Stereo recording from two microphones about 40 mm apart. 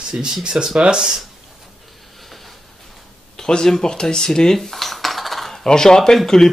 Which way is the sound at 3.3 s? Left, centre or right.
Centre.